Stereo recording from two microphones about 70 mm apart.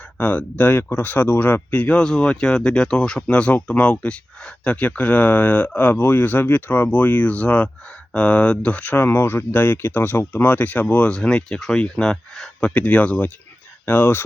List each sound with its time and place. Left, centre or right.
0.2 s speech: left